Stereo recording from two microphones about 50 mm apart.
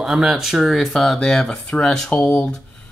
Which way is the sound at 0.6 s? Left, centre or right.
Centre.